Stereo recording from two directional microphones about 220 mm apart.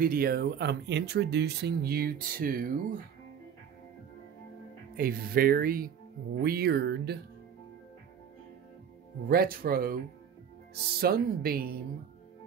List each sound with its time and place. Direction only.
0.0 s speech: 40° right (ahead or behind)
4.9 s speech: 40° right (ahead or behind)
9.3 s speech: 40° right (ahead or behind)